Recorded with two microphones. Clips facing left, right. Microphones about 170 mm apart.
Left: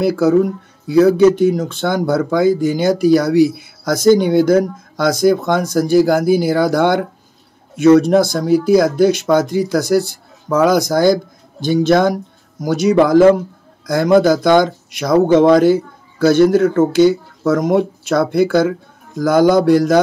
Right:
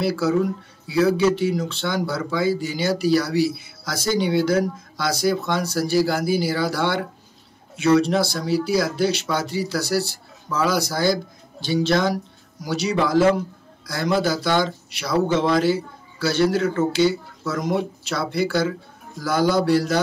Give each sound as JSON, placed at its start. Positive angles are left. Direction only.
{"t": 0.0, "sound": "speech", "side_deg": 50}